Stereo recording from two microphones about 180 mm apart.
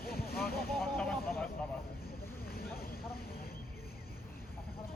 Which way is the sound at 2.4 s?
55° left (ahead or behind).